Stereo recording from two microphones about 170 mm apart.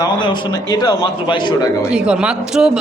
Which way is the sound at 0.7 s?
25° left (ahead or behind).